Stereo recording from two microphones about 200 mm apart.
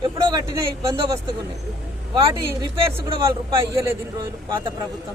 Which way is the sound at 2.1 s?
25° right (ahead or behind).